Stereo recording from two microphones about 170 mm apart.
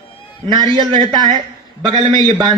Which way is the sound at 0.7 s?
25° right (ahead or behind).